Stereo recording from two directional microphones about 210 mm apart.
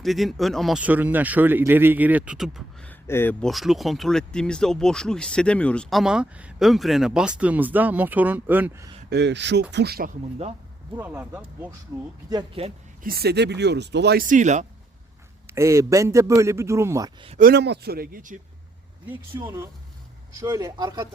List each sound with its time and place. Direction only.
0.0 s speech: centre (ahead or behind)
9.0 s speech: 55° right (ahead or behind); by 10.5 s 35° right (ahead or behind)
10.9 s a man's voice: 10° right (ahead or behind)
12.3 s speech: 25° right (ahead or behind)
13.0 s speech: 45° right (ahead or behind)
15.5 s a man's voice: 15° right (ahead or behind)
17.3 s speech: 45° right (ahead or behind)
19.1 s a man's voice: 15° right (ahead or behind)